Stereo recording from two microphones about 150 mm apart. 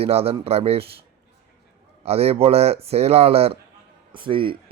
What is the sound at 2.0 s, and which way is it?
Speech, 40° right (ahead or behind).